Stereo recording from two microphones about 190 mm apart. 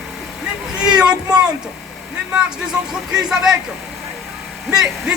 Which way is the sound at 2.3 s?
5° right (ahead or behind).